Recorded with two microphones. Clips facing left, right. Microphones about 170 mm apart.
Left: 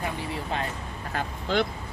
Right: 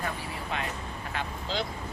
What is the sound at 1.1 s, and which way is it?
Speech, 55° left (ahead or behind).